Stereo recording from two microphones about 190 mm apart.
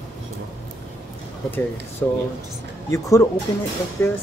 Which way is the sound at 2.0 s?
10° left (ahead or behind).